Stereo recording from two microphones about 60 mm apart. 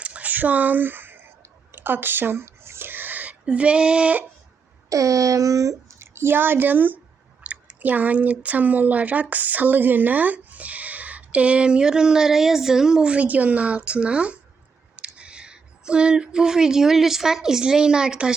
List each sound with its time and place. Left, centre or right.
0.0 s a sound: right
3.4 s a woman's voice: centre
4.9 s speech: right
6.0 s speech: right; by 14.3 s centre
14.9 s a sound: centre
15.9 s a woman's voice: centre